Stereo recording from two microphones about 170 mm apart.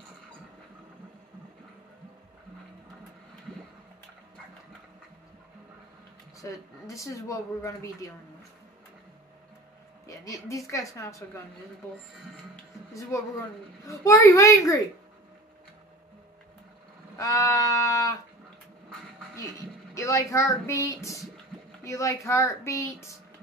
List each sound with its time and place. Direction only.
6.4 s speech: 20° left (ahead or behind)
10.0 s a woman's voice: 20° left (ahead or behind)
13.8 s speech: 20° left (ahead or behind)
17.2 s sheep: 20° left (ahead or behind)
19.9 s speech: 20° left (ahead or behind)